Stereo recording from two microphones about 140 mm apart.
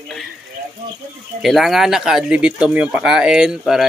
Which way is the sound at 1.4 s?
Centre (ahead or behind).